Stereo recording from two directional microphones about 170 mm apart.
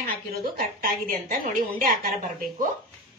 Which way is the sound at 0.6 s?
55° right (ahead or behind).